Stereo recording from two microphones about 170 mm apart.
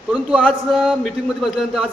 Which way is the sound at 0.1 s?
5° right (ahead or behind).